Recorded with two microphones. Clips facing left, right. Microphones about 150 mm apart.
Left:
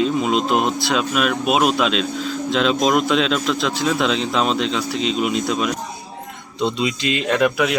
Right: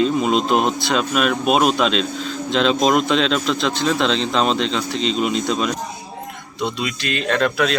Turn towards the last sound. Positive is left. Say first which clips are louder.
# left 1 dB
turn(degrees=15)  # may be behind; listen again after turning